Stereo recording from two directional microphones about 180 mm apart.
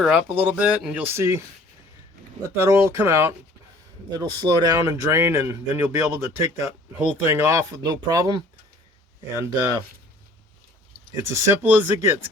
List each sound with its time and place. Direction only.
0.0 s speech: 5° right (ahead or behind)
2.6 s speech: 15° right (ahead or behind)
11.1 s speech: 15° right (ahead or behind)